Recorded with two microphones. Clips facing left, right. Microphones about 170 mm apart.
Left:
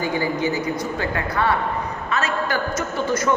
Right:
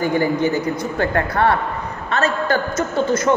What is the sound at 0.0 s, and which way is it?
A man's voice, 55° right (ahead or behind).